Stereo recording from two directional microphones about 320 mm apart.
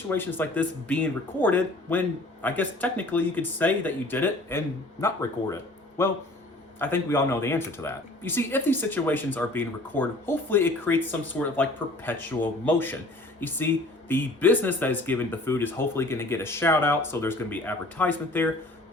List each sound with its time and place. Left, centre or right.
0.1 s speech: centre